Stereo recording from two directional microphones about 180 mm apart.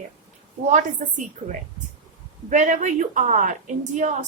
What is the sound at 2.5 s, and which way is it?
A woman's voice, 45° right (ahead or behind).